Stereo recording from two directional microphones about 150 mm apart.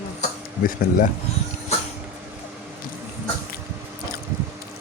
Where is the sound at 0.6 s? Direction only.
70° left (ahead or behind).